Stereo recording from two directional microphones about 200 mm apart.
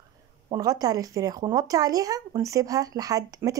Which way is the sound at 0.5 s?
20° right (ahead or behind).